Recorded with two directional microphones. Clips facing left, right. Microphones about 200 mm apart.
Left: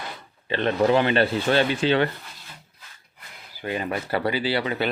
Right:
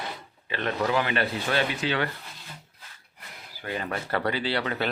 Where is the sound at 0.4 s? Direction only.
30° left (ahead or behind).